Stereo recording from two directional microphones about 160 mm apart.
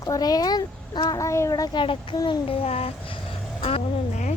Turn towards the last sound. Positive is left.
turn(degrees=40)  # may be behind; listen again after turning